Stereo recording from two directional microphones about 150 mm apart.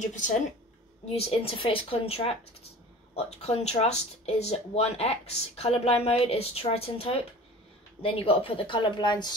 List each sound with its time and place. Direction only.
0.0 s speech: 55° left (ahead or behind)
1.0 s a woman's voice: 40° left (ahead or behind)